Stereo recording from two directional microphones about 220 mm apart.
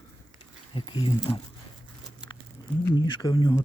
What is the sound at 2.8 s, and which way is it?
Speech, 20° left (ahead or behind).